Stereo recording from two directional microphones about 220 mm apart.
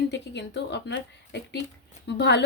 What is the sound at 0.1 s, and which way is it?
A woman's voice, 50° left (ahead or behind).